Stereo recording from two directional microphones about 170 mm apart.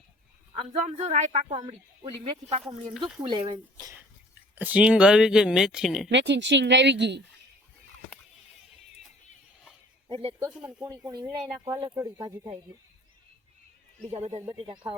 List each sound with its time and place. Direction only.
0.5 s speech: 40° right (ahead or behind)
1.5 s speech: 25° right (ahead or behind)
3.2 s speech: 30° right (ahead or behind)
4.5 s speech: 10° right (ahead or behind)
6.1 s speech: 90° right
10.1 s speech: 30° right (ahead or behind)
14.1 s speech: 35° right (ahead or behind)